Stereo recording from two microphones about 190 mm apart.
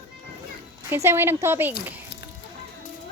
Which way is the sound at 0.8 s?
15° right (ahead or behind).